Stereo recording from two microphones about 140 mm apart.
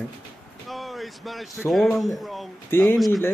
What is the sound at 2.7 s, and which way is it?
Speech, 15° left (ahead or behind).